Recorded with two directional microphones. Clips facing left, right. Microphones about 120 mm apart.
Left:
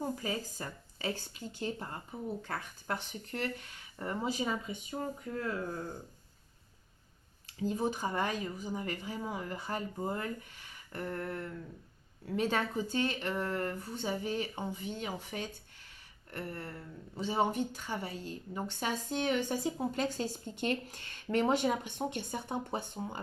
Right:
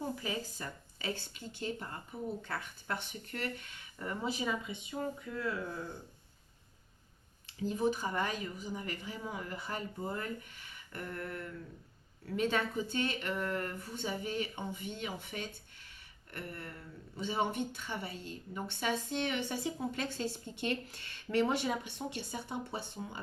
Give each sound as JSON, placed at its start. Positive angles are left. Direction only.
{"t": 0.2, "sound": "speech", "side_deg": 40}
{"t": 7.4, "sound": "speech", "side_deg": 35}